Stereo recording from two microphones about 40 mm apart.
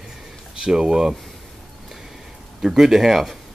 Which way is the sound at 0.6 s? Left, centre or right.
Centre.